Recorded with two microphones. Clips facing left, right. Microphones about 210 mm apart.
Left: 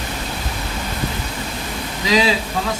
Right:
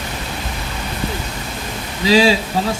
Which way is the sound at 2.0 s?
30° right (ahead or behind).